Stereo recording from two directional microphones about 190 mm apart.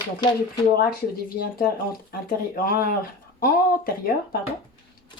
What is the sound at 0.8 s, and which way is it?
Speech, 50° left (ahead or behind).